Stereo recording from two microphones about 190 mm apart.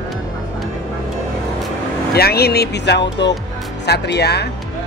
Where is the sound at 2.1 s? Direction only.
55° left (ahead or behind).